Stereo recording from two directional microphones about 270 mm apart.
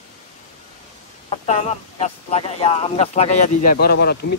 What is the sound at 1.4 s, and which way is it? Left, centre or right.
A man's voice, left.